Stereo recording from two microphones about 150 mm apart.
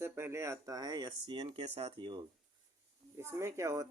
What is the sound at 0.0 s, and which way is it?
Speech, 15° right (ahead or behind).